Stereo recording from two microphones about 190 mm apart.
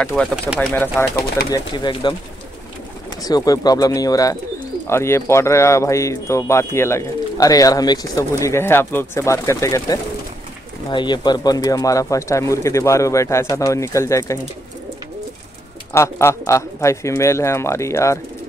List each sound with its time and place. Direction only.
0.0 s speech: 5° left (ahead or behind)
1.5 s speech: 25° left (ahead or behind)
3.2 s speech: 20° left (ahead or behind)
15.9 s speech: 15° left (ahead or behind)